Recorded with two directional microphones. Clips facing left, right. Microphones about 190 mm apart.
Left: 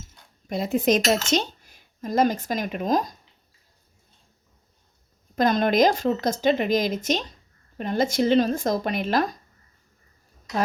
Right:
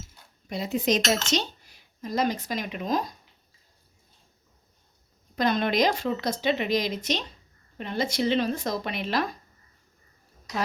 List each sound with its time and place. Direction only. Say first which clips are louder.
0.4 s speech: left 4 dB; 50° left (ahead or behind)
5.4 s speech: left 4 dB; 45° left (ahead or behind)